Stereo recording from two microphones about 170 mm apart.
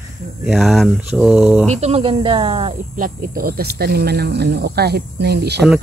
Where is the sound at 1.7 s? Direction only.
35° right (ahead or behind).